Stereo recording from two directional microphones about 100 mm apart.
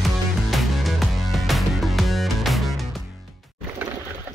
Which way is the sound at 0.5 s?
Centre (ahead or behind).